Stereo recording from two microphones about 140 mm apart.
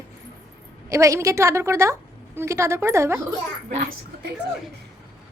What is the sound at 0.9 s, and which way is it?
A woman's voice, 20° right (ahead or behind).